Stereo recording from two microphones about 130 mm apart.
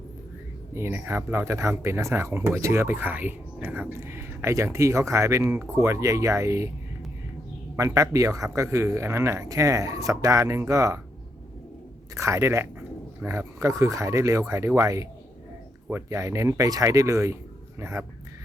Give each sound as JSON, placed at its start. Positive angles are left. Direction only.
{"t": 0.7, "sound": "speech", "side_deg": -20}
{"t": 7.8, "sound": "speech", "side_deg": -25}
{"t": 12.1, "sound": "speech", "side_deg": -25}